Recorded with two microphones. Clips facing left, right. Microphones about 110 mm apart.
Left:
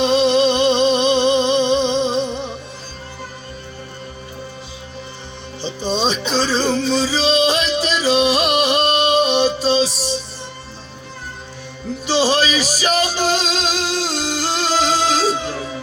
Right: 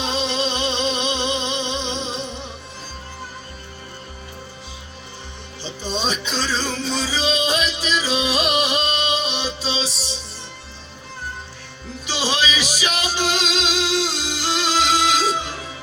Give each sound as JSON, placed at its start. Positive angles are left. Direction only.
{"t": 0.1, "sound": "a sound", "side_deg": 50}
{"t": 5.6, "sound": "music", "side_deg": 30}
{"t": 8.1, "sound": "music", "side_deg": 60}
{"t": 12.0, "sound": "music", "side_deg": 40}